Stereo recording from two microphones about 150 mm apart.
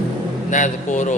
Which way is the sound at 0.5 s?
55° left (ahead or behind).